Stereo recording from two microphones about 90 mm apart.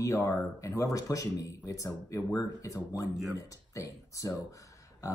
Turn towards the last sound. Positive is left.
turn(degrees=40)  # may be behind; listen again after turning